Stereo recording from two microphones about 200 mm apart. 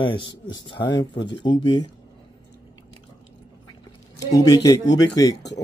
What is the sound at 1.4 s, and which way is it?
Speech, 25° left (ahead or behind).